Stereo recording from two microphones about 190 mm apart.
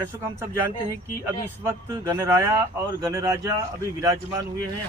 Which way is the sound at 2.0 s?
15° right (ahead or behind).